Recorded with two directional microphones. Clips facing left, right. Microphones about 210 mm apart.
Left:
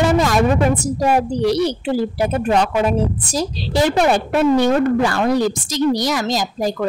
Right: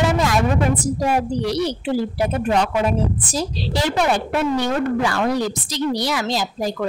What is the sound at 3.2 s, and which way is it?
A woman's voice, 45° left (ahead or behind).